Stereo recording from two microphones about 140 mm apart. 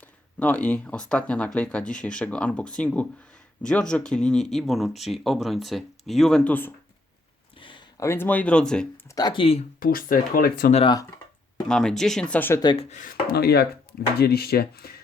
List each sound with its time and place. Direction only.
0.0 s speech: 10° left (ahead or behind)
7.6 s a sound: 35° left (ahead or behind)
7.9 s speech: 20° left (ahead or behind)
9.0 s speech: 30° left (ahead or behind)
9.8 s speech: 90° left
11.7 s speech: 5° left (ahead or behind)
12.7 s speech: 45° left (ahead or behind)
13.0 s speech: 90° left